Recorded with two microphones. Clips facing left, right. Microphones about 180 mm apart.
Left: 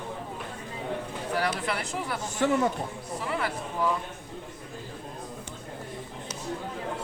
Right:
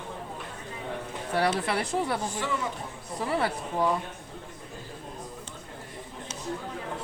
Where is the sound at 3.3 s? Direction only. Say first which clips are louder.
Right 3 dB; 30° right (ahead or behind).